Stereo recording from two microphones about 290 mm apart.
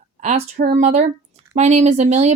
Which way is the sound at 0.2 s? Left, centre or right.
Right.